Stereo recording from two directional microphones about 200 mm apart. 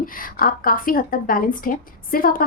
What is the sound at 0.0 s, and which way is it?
Speech, 45° left (ahead or behind).